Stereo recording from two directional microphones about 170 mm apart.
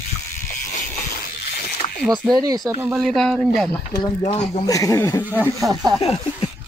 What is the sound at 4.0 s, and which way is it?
Speech, 30° left (ahead or behind).